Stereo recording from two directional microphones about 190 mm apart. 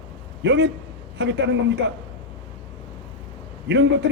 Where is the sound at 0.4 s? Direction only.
65° right (ahead or behind).